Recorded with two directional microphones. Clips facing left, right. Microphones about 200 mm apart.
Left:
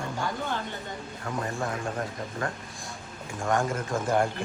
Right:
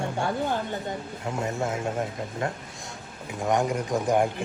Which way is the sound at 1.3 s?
25° right (ahead or behind).